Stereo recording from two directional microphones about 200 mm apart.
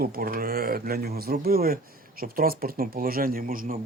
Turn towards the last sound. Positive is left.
turn(degrees=-45)  # may be behind; listen again after turning